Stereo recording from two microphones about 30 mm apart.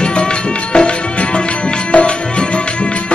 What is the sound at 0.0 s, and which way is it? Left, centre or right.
Music, left.